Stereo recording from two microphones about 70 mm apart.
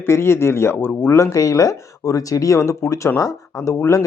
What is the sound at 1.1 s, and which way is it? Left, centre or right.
Speech, left.